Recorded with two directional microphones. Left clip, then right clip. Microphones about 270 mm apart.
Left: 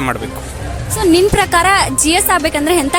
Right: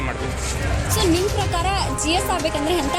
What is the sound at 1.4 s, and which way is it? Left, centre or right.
A woman's voice, left.